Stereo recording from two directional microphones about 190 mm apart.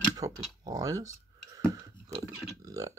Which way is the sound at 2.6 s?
15° right (ahead or behind).